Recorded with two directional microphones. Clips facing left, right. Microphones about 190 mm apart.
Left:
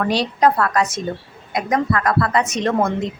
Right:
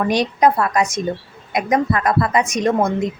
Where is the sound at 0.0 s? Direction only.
15° right (ahead or behind).